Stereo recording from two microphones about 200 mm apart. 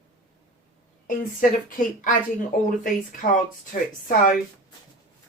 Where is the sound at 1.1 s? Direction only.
40° left (ahead or behind).